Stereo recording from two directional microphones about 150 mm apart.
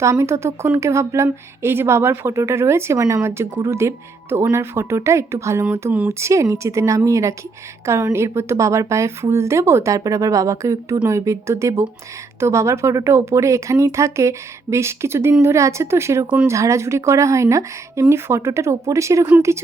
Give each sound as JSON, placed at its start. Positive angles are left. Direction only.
{"t": 0.0, "sound": "a woman's voice", "side_deg": -20}